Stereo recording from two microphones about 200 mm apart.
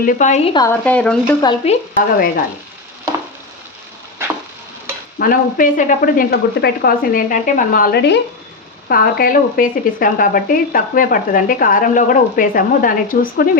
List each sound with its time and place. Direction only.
0.0 s speech: 40° left (ahead or behind)
0.5 s speech: 20° left (ahead or behind)
0.9 s speech: 5° left (ahead or behind)
1.6 s speech: 30° left (ahead or behind)
2.1 s speech: 45° left (ahead or behind)
5.2 s speech: 45° left (ahead or behind)